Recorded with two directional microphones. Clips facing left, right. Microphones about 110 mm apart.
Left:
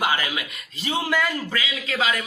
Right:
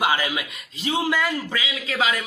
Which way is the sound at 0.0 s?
15° right (ahead or behind).